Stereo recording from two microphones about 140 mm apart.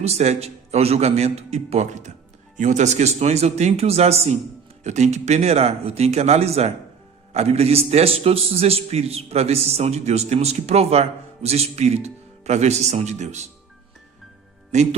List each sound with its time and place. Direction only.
0.0 s a man's voice: 50° right (ahead or behind)
14.7 s speech: 55° right (ahead or behind)